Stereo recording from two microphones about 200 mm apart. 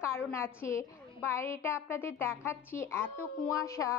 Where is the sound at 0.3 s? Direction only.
15° left (ahead or behind).